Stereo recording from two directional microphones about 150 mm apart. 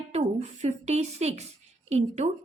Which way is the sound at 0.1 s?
45° right (ahead or behind).